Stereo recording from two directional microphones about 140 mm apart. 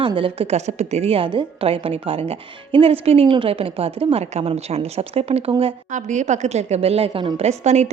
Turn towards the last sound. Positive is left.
turn(degrees=-55)  # may be behind; listen again after turning